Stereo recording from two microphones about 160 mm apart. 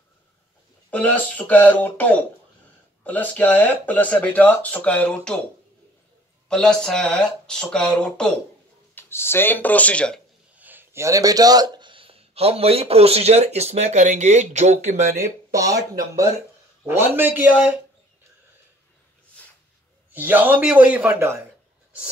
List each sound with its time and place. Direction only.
0.8 s speech: 10° left (ahead or behind)
6.5 s speech: 5° left (ahead or behind)
10.5 s speech: 10° right (ahead or behind); by 15.0 s 45° right (ahead or behind)
15.1 s a man's voice: 20° right (ahead or behind)
20.1 s a man's voice: 10° right (ahead or behind)